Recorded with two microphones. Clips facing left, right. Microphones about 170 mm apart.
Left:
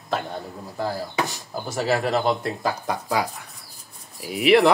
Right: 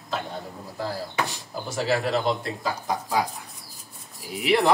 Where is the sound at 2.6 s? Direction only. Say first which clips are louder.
Left 2 dB; 65° left (ahead or behind).